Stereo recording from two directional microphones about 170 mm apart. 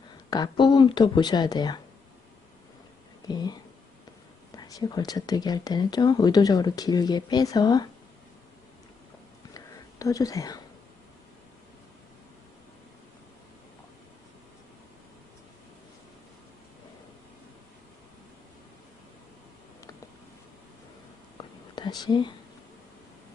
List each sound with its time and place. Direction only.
0.3 s speech: 25° left (ahead or behind)
3.2 s speech: 25° left (ahead or behind)
9.6 s whispering: 20° left (ahead or behind)
21.8 s a sound: 25° left (ahead or behind)